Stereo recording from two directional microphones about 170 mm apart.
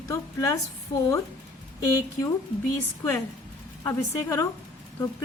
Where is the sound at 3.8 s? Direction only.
15° left (ahead or behind).